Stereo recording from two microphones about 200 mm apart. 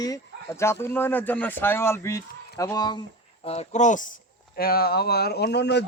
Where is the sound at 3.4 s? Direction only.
30° left (ahead or behind).